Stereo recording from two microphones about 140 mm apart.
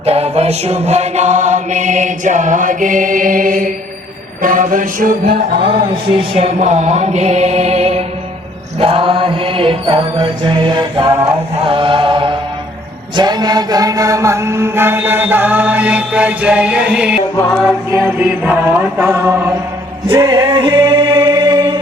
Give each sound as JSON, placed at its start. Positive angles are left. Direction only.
{"t": 0.0, "sound": "mantra", "side_deg": -50}
{"t": 5.5, "sound": "mantra", "side_deg": -40}
{"t": 11.1, "sound": "music", "side_deg": -35}
{"t": 13.1, "sound": "chant", "side_deg": -30}
{"t": 20.1, "sound": "male singing", "side_deg": -25}